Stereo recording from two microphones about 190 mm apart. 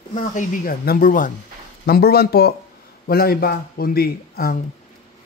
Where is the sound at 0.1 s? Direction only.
40° left (ahead or behind).